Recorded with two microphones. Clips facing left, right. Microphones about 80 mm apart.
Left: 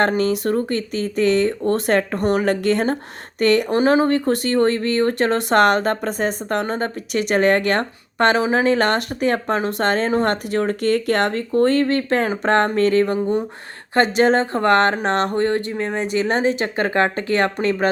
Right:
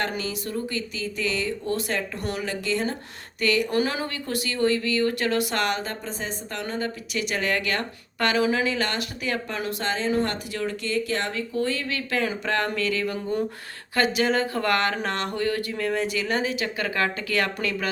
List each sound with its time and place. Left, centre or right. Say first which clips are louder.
0.0 s speech: left 11 dB; left
3.7 s speech: left 10 dB; left
9.8 s speech: left 6 dB; left
16.2 s speech: left 7 dB; left